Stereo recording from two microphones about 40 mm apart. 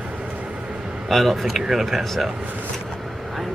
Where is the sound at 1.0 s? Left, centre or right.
Centre.